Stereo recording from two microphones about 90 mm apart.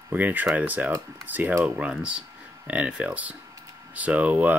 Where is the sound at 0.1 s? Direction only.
20° right (ahead or behind).